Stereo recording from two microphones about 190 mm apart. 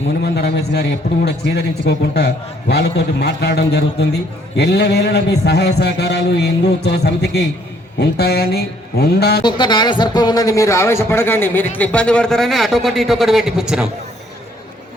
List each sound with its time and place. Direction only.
0.3 s a man's voice: 60° left (ahead or behind)
9.4 s speech: 25° left (ahead or behind); by 13.9 s 5° right (ahead or behind)